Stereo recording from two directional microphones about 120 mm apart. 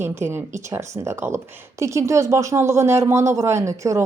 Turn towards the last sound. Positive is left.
turn(degrees=-25)  # may be behind; listen again after turning